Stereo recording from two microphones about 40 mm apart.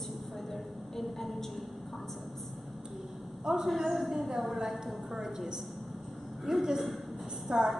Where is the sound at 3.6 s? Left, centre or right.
Centre.